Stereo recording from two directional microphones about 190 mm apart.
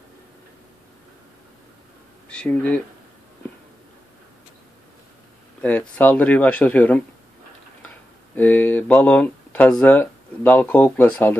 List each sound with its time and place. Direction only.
2.2 s speech: 5° left (ahead or behind)
5.6 s speech: 5° left (ahead or behind)
8.4 s speech: 10° left (ahead or behind)